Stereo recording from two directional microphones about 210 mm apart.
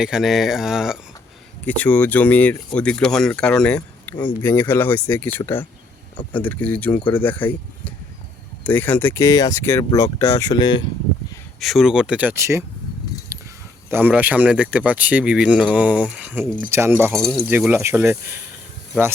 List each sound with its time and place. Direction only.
0.0 s speech: 5° right (ahead or behind)
3.8 s a sound: 15° left (ahead or behind)
4.4 s speech: 10° left (ahead or behind)
11.6 s speech: centre (ahead or behind)
13.3 s a sound: 15° right (ahead or behind)
13.9 s speech: 10° right (ahead or behind)